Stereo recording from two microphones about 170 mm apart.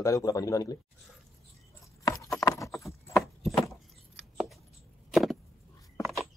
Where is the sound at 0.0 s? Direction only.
20° left (ahead or behind).